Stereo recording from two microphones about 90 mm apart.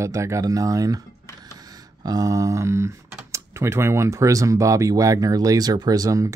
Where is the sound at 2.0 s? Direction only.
45° right (ahead or behind).